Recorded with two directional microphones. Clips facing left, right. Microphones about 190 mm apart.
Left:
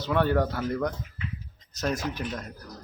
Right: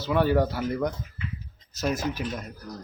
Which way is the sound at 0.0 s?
5° right (ahead or behind).